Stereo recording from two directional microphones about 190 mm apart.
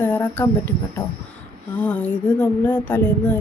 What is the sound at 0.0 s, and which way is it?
Speech, 10° left (ahead or behind).